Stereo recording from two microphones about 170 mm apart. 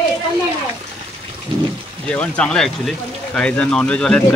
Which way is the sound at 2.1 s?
5° left (ahead or behind).